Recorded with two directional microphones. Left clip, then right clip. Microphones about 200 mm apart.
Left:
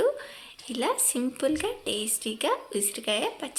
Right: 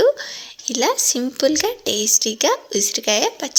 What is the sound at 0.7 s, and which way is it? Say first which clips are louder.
Speech: right 9 dB; 30° right (ahead or behind).